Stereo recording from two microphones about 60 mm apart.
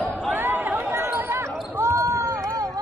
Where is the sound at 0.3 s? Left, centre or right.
Right.